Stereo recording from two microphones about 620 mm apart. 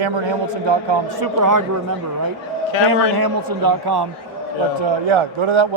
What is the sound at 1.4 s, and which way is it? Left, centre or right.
Speech, right.